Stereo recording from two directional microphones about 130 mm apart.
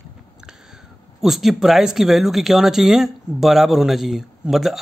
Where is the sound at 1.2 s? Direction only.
Centre (ahead or behind).